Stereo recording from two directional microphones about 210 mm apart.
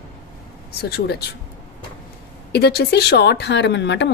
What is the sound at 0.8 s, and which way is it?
Speech, 50° left (ahead or behind).